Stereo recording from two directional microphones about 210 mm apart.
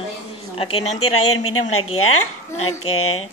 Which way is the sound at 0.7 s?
90° left.